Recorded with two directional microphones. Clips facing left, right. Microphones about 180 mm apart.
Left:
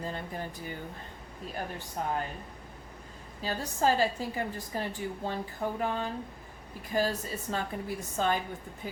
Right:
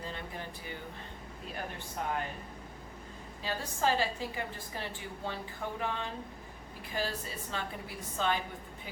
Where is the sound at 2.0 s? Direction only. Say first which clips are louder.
Left 3 dB; 35° left (ahead or behind).